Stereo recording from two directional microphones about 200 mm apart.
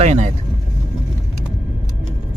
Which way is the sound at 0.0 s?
35° right (ahead or behind).